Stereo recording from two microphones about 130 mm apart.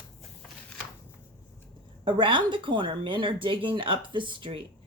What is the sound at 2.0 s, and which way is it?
A woman's voice, 40° right (ahead or behind).